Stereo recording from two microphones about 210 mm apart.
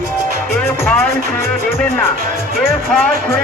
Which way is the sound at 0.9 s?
5° left (ahead or behind).